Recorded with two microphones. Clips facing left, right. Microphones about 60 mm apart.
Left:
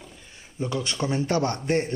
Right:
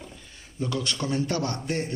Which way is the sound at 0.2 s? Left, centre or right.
Centre.